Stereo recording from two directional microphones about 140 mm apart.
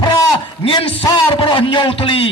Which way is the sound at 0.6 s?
40° left (ahead or behind).